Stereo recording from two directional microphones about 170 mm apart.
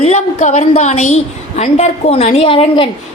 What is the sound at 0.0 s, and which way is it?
A woman's voice, 40° left (ahead or behind).